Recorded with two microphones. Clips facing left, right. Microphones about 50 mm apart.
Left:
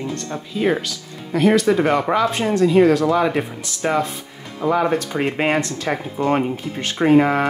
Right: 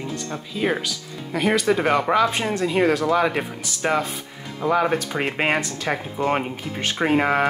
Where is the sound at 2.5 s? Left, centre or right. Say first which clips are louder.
Left 7 dB; centre.